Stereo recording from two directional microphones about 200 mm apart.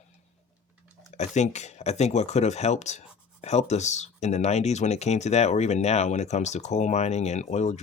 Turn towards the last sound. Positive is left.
turn(degrees=35)  # may be behind; listen again after turning